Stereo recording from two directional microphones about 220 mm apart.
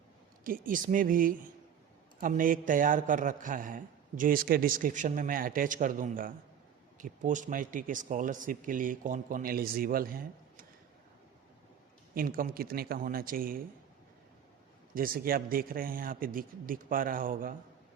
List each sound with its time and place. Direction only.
0.4 s a man's voice: 40° right (ahead or behind)
12.1 s a man's voice: 40° right (ahead or behind)
14.9 s a man's voice: 40° right (ahead or behind)